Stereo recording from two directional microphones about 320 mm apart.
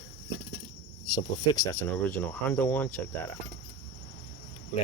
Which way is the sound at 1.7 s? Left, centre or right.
Centre.